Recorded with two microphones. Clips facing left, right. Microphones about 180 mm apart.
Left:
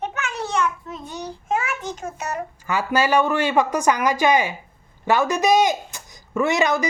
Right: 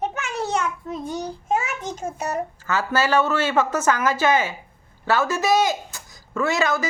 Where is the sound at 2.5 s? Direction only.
15° left (ahead or behind).